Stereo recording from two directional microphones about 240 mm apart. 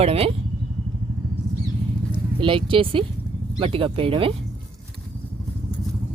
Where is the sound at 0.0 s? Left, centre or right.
Right.